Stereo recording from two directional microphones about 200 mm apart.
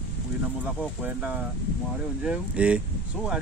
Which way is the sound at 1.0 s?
5° right (ahead or behind).